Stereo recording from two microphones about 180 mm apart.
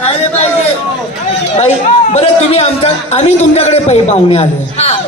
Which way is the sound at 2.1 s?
35° left (ahead or behind).